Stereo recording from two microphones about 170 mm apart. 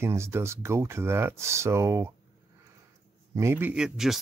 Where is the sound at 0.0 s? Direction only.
15° right (ahead or behind).